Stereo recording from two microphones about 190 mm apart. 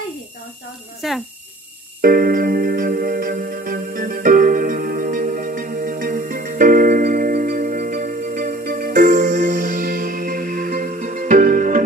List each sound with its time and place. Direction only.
1.0 s speech: centre (ahead or behind)
2.0 s music: 50° right (ahead or behind)